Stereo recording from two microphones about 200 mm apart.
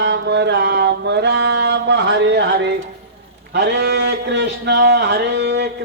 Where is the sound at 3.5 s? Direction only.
60° right (ahead or behind).